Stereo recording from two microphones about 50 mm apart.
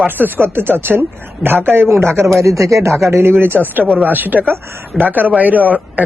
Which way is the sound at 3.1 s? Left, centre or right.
Right.